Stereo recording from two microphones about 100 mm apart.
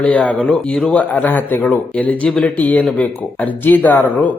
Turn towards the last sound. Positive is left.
turn(degrees=15)  # may be behind; listen again after turning